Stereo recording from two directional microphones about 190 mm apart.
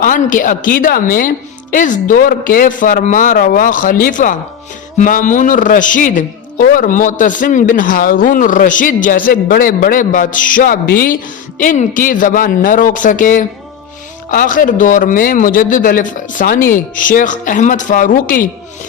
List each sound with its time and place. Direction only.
0.0 s a man's voice: 45° left (ahead or behind)